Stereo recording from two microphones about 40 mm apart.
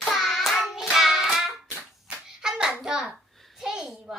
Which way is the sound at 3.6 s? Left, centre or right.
Centre.